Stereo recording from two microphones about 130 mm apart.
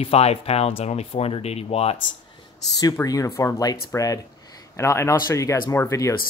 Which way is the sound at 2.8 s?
25° left (ahead or behind).